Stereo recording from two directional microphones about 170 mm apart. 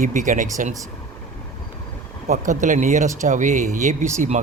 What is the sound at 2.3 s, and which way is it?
Speech, 50° right (ahead or behind).